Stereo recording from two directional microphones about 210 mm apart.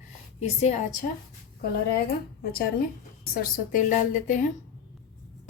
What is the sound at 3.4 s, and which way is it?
A woman's voice, 35° left (ahead or behind).